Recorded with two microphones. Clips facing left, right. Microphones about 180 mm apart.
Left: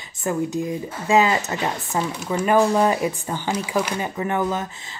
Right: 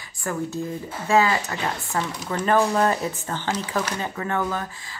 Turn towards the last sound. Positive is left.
turn(degrees=20)  # may be behind; listen again after turning